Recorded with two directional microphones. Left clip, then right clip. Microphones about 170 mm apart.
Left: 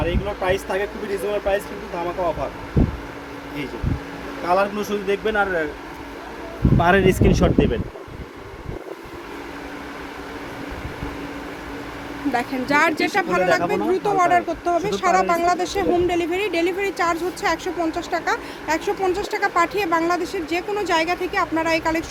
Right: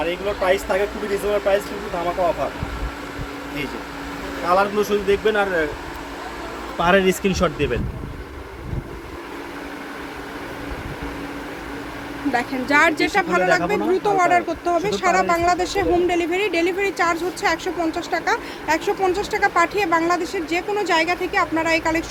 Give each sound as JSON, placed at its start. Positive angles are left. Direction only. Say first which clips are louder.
{"t": 0.0, "sound": "speech", "louder": "right 2 dB", "side_deg": 20}
{"t": 4.4, "sound": "speech", "louder": "right 2 dB", "side_deg": 20}
{"t": 6.7, "sound": "speech", "louder": "even", "side_deg": 30}
{"t": 12.3, "sound": "speech", "louder": "right 1 dB", "side_deg": 5}